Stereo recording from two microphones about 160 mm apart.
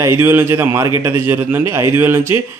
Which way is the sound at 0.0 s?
15° right (ahead or behind).